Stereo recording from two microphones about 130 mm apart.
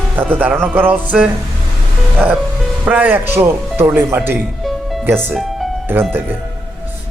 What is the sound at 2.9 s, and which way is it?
Speech, 15° right (ahead or behind).